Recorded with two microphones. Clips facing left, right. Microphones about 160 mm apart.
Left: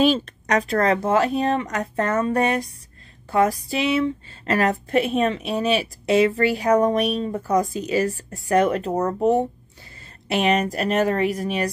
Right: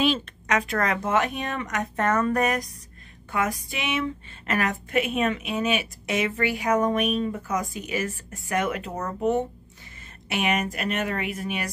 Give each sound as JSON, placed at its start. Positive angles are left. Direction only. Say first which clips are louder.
{"t": 0.0, "sound": "a woman's voice", "louder": "left 5 dB", "side_deg": 40}